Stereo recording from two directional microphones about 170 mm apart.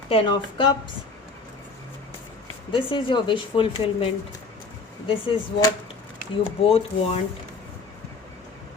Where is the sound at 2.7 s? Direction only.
30° left (ahead or behind).